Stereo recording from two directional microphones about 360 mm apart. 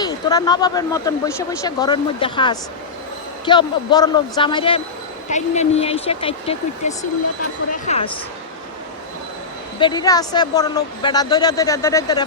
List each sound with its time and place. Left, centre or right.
0.0 s speech: centre
9.8 s speech: centre